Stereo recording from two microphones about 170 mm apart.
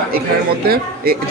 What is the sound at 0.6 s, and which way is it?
Speech, 65° right (ahead or behind).